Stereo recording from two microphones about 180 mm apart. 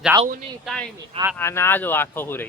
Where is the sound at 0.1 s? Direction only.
20° right (ahead or behind).